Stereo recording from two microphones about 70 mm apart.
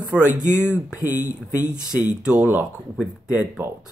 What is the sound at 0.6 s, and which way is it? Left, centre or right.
Speech, right.